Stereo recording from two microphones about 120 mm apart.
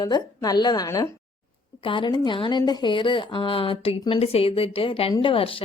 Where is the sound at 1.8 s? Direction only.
45° left (ahead or behind).